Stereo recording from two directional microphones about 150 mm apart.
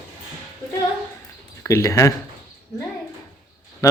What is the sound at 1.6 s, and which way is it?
Speech, 20° left (ahead or behind).